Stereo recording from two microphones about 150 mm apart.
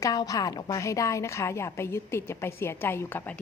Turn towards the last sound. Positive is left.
turn(degrees=10)  # may be behind; listen again after turning